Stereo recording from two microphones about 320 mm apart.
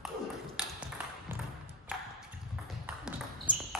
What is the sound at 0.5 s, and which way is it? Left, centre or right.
Ping, centre.